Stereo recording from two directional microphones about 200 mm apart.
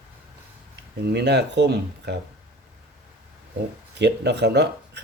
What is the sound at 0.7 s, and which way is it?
Speech, 55° right (ahead or behind).